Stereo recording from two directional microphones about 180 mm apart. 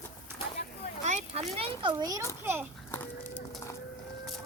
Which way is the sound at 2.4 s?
10° right (ahead or behind).